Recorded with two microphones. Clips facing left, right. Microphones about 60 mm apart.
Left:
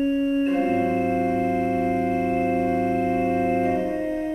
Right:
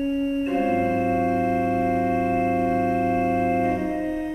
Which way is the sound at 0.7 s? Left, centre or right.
Centre.